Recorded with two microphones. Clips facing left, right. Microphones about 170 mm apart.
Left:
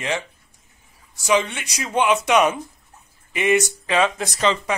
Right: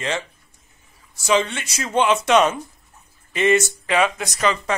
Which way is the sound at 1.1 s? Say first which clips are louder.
Even; 15° left (ahead or behind).